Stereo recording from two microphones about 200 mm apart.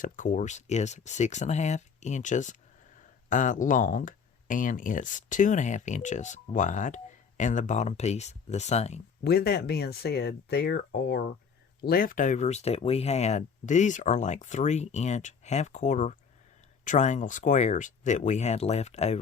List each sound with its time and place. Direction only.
0.0 s speech: 40° left (ahead or behind)
9.2 s speech: 50° left (ahead or behind); by 19.2 s 35° left (ahead or behind)